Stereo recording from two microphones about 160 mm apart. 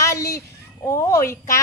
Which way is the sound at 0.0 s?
20° left (ahead or behind).